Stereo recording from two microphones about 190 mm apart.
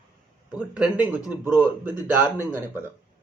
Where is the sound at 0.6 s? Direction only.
5° right (ahead or behind).